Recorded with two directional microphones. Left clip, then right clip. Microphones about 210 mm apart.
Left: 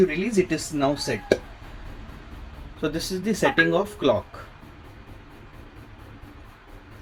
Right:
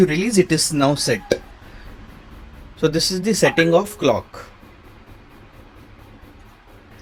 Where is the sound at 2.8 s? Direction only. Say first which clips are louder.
Right 9 dB; 40° right (ahead or behind).